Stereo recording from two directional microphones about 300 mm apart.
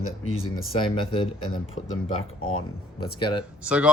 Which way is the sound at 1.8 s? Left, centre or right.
Left.